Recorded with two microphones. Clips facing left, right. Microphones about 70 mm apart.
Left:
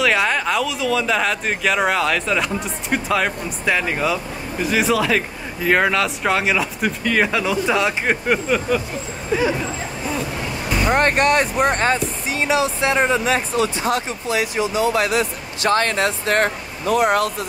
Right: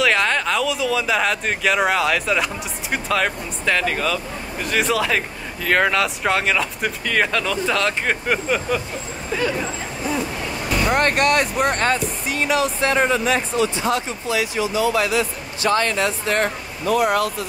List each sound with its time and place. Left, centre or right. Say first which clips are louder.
0.0 s speech: even; centre
4.6 s speech: left 2 dB; centre
9.3 s speech: left 3 dB; centre
10.9 s speech: left 2 dB; centre
13.6 s speech: even; left